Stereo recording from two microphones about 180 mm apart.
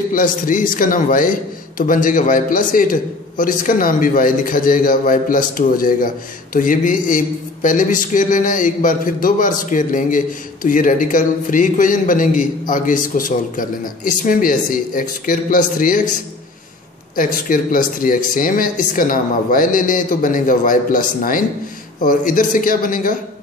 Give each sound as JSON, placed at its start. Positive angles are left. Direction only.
{"t": 0.1, "sound": "a man's voice", "side_deg": 50}
{"t": 17.1, "sound": "a man's voice", "side_deg": 50}